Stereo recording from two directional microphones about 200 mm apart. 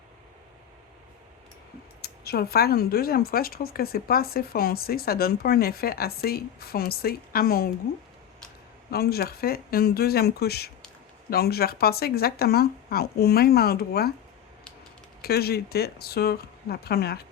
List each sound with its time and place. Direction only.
2.0 s speech: 50° left (ahead or behind)
8.9 s speech: 50° left (ahead or behind)
15.2 s speech: 50° left (ahead or behind)